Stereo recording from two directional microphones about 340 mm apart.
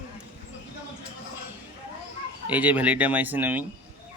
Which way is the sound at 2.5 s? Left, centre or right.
Centre.